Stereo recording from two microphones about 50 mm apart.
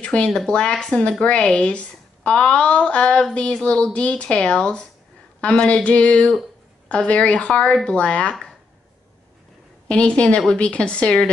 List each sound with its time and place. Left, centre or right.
0.0 s a woman's voice: left
9.8 s a woman's voice: left